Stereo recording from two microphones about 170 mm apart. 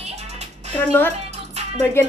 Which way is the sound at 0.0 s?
40° right (ahead or behind).